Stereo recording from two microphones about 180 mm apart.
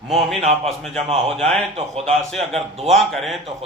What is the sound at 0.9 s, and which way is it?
Speech, 35° right (ahead or behind).